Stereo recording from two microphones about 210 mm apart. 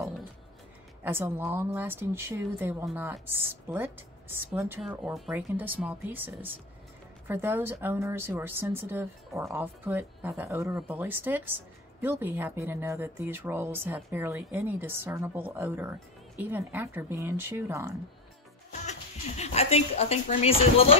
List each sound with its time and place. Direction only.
1.0 s speech: 10° right (ahead or behind)
18.7 s speech: 35° left (ahead or behind)